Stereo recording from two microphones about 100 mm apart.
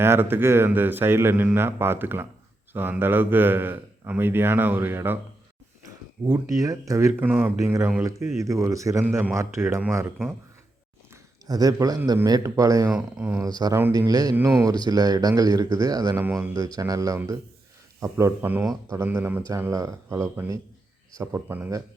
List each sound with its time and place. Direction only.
0.0 s a man's voice: 25° right (ahead or behind)
6.2 s speech: 35° right (ahead or behind)
7.2 s a man's voice: 20° right (ahead or behind)
11.4 s speech: 40° right (ahead or behind)
12.9 s speech: 10° right (ahead or behind)
13.4 s speech: 40° right (ahead or behind)
16.1 s a man's voice: 25° right (ahead or behind)
16.6 s a man's voice: 35° right (ahead or behind); by 19.4 s 20° right (ahead or behind)
19.7 s a man's voice: 35° right (ahead or behind)